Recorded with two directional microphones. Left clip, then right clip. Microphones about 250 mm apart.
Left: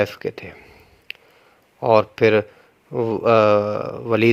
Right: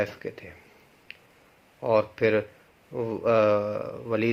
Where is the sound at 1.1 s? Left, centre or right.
Left.